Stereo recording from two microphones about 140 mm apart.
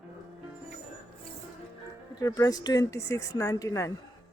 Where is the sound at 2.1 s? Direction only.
30° left (ahead or behind).